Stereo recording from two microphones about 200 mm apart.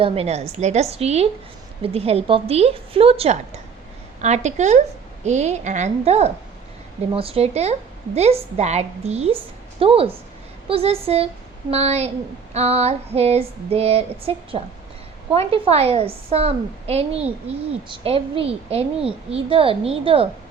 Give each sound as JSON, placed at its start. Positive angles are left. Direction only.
{"t": 0.0, "sound": "a woman's voice", "side_deg": -30}